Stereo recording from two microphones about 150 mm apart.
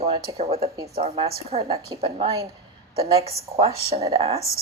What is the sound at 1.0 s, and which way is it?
Speech, 40° right (ahead or behind).